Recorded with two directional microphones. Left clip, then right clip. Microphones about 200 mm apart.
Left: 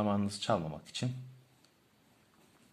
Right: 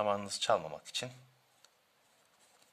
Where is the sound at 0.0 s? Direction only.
20° right (ahead or behind).